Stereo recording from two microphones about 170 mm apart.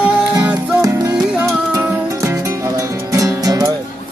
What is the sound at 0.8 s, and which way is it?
Music, 20° right (ahead or behind).